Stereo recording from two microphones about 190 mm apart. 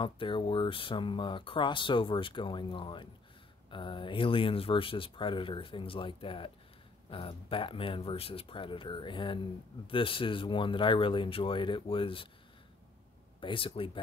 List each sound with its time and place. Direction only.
0.0 s speech: 25° left (ahead or behind)
13.4 s speech: 25° left (ahead or behind)